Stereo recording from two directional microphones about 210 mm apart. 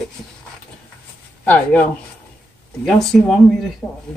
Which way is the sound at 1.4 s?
5° left (ahead or behind).